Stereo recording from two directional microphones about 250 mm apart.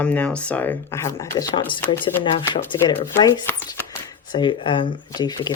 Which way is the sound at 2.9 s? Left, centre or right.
Centre.